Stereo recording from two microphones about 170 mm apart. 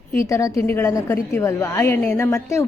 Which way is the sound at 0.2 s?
20° left (ahead or behind).